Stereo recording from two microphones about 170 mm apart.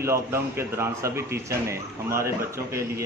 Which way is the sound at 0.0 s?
15° right (ahead or behind).